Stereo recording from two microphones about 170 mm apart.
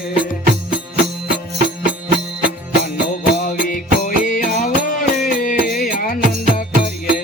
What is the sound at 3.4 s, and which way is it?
Music, 55° left (ahead or behind).